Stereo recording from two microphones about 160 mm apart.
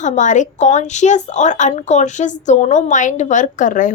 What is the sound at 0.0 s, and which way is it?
A woman's voice, 50° left (ahead or behind).